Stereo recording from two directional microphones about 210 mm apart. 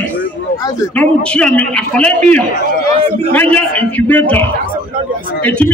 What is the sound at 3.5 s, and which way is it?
A man's voice, 5° left (ahead or behind).